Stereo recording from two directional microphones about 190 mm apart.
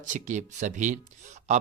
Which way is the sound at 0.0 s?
40° right (ahead or behind).